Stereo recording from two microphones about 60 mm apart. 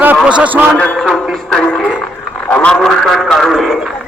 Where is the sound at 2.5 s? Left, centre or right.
Centre.